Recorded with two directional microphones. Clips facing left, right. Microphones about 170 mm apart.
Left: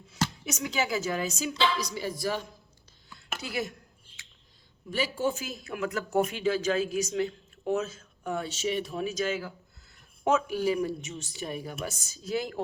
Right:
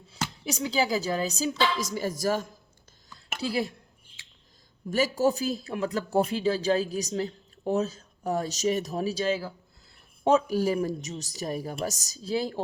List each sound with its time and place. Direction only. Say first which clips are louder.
0.4 s speech: right 8 dB; 35° right (ahead or behind)
3.4 s speech: right 5 dB; 30° right (ahead or behind)
4.9 s speech: right 5 dB; 45° right (ahead or behind)